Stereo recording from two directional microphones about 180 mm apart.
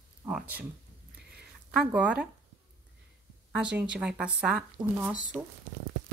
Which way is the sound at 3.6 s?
5° right (ahead or behind).